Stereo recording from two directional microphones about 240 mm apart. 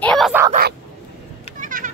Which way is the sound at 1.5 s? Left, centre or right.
Right.